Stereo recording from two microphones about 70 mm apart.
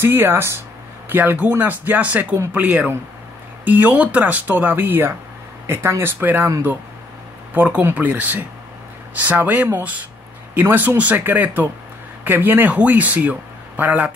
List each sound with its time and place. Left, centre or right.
0.0 s a man's voice: right
7.5 s a man's voice: right